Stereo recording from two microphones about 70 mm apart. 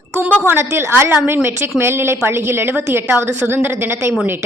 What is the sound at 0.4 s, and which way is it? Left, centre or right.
A woman's voice, right.